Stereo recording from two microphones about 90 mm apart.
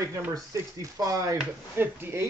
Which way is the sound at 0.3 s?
40° right (ahead or behind).